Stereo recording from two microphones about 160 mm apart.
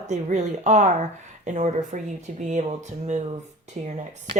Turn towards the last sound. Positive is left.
turn(degrees=-55)  # may be behind; listen again after turning